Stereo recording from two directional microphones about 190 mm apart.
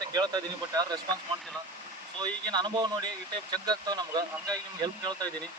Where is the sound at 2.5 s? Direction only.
25° right (ahead or behind).